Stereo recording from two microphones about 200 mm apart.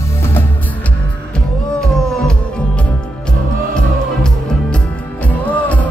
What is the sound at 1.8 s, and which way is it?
Music, 5° left (ahead or behind).